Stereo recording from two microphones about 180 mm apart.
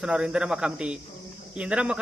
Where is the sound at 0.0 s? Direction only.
5° right (ahead or behind).